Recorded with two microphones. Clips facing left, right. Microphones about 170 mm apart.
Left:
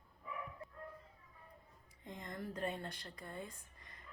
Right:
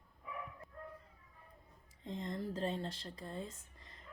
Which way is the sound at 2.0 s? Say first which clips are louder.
Right 5 dB; 25° right (ahead or behind).